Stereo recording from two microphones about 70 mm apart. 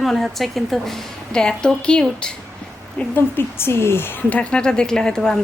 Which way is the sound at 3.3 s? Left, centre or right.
Left.